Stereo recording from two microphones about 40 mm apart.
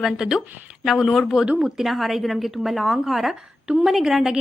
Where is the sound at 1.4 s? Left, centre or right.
Centre.